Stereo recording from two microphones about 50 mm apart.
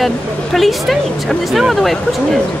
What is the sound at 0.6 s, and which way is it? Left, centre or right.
Speech, centre.